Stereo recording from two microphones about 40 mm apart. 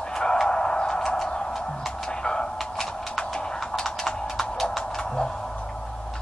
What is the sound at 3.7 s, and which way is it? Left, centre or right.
Typing, centre.